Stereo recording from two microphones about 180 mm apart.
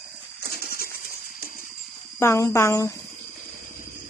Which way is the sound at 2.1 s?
15° left (ahead or behind).